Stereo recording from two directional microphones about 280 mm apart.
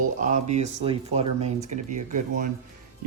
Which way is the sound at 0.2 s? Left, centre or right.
Right.